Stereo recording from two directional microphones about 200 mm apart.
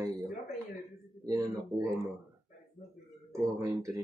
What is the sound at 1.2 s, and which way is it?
Speech, 15° right (ahead or behind).